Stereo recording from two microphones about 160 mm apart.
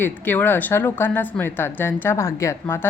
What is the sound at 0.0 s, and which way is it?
A woman's voice, 10° left (ahead or behind).